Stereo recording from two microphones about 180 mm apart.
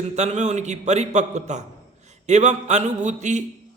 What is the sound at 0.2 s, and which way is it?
A man's voice, 40° right (ahead or behind).